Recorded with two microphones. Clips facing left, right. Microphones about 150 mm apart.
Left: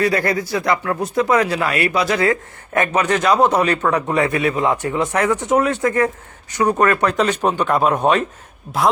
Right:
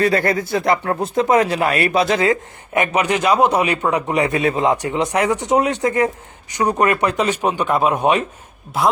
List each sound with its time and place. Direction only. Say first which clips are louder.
0.0 s speech: right 1 dB; 30° right (ahead or behind); by 8.2 s 10° right (ahead or behind)